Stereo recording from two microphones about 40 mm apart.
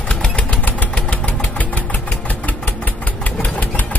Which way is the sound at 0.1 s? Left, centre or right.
Left.